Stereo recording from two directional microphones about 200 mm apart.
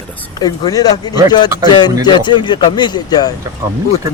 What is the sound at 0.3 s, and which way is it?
Speech, 20° left (ahead or behind).